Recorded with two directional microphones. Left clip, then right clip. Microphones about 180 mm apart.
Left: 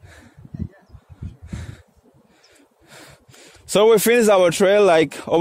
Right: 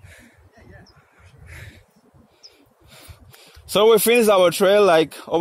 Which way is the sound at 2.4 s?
45° left (ahead or behind).